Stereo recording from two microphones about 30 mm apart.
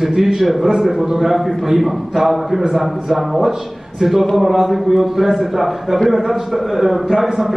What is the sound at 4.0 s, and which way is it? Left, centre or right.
A man's voice, centre.